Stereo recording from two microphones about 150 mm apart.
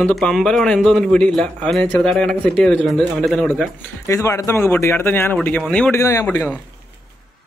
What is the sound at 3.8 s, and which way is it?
Speech, 20° left (ahead or behind).